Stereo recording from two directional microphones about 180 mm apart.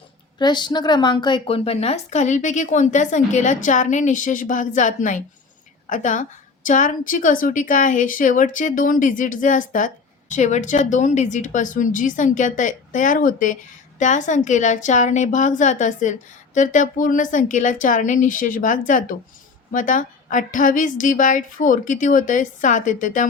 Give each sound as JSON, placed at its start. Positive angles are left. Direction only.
{"t": 0.3, "sound": "speech", "side_deg": 25}